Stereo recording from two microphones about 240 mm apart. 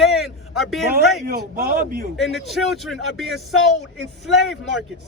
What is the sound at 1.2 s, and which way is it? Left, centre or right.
Speech, right.